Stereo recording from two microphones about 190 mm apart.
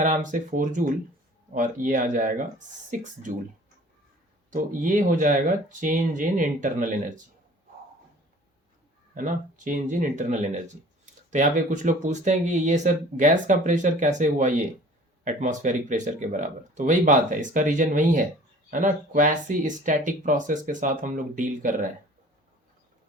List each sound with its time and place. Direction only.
0.0 s speech: 40° right (ahead or behind)
4.5 s speech: 45° right (ahead or behind)
9.1 s speech: 45° right (ahead or behind)